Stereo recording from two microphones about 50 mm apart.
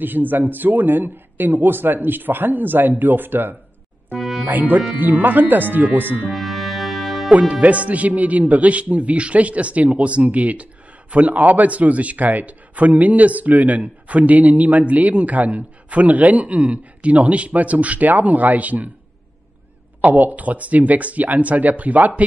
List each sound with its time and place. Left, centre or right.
0.0 s speech: right
4.2 s music: centre
4.5 s speech: right
6.3 s music: centre
7.2 s speech: right
20.0 s speech: right